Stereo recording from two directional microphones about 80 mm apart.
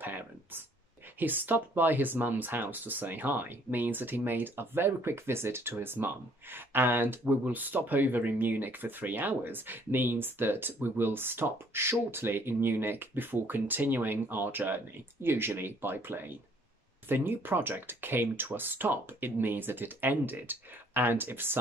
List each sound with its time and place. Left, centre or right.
0.0 s speech: right